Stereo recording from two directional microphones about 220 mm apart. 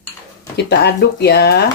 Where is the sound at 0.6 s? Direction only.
50° left (ahead or behind).